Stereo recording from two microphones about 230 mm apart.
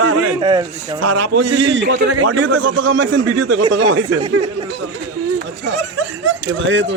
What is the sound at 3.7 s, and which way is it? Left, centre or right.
Speech, right.